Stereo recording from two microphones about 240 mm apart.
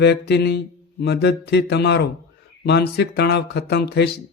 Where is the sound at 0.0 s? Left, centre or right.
Left.